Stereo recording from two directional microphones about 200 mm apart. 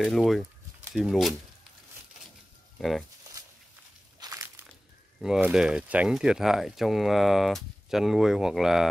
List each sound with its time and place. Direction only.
0.0 s speech: centre (ahead or behind)
2.8 s speech: centre (ahead or behind)
4.2 s crushing: 20° right (ahead or behind)
5.2 s speech: 5° right (ahead or behind)